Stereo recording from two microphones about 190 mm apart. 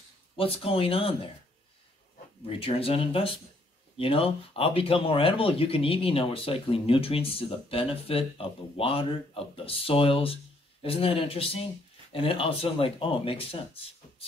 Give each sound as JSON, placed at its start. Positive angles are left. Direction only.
{"t": 0.4, "sound": "speech", "side_deg": 30}
{"t": 2.6, "sound": "speech", "side_deg": 30}